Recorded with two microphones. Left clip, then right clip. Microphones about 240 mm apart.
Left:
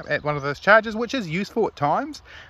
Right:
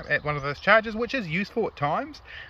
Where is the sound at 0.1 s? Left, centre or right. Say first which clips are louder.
Left 2 dB; centre.